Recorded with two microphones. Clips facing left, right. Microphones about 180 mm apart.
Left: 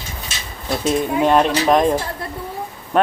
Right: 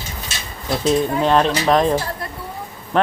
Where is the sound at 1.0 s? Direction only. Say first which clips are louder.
Left 1 dB; 10° left (ahead or behind).